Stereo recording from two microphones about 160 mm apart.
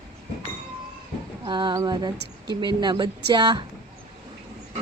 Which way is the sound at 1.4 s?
30° right (ahead or behind).